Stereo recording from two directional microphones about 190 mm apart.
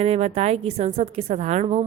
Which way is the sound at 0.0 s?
35° right (ahead or behind).